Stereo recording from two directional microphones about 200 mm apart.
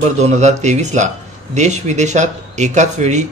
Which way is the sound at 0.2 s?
35° right (ahead or behind).